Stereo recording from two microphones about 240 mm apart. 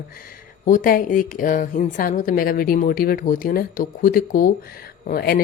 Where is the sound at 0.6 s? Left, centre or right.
Left.